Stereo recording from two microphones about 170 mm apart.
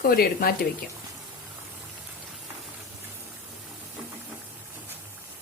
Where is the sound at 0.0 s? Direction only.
55° left (ahead or behind).